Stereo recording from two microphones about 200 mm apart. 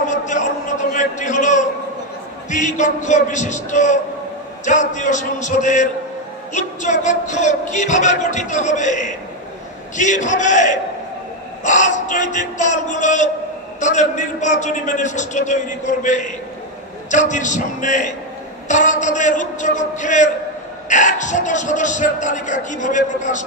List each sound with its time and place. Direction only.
0.0 s music: 40° left (ahead or behind)